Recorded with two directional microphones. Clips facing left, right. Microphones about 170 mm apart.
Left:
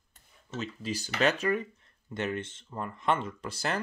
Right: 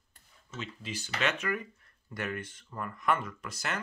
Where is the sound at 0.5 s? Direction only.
40° left (ahead or behind).